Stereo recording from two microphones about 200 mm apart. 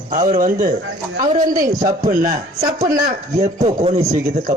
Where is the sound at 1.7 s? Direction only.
15° right (ahead or behind).